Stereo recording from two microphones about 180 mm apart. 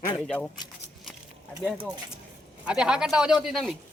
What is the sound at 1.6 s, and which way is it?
Speech, 5° right (ahead or behind).